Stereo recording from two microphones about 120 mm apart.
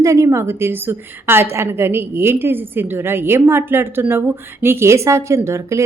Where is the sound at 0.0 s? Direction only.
25° right (ahead or behind).